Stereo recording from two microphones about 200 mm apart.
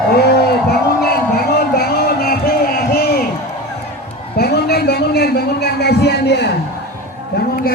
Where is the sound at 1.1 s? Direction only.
50° left (ahead or behind).